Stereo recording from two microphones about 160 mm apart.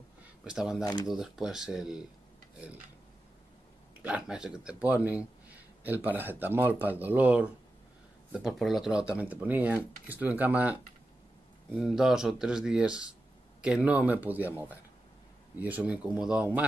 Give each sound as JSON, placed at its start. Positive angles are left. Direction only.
{"t": 0.4, "sound": "speech", "side_deg": -5}
{"t": 4.0, "sound": "speech", "side_deg": -5}